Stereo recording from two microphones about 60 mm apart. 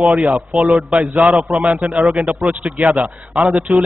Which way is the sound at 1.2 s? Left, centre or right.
Centre.